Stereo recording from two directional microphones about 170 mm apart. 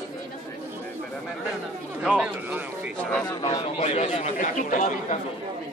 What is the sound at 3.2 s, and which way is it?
A man's voice, 30° left (ahead or behind).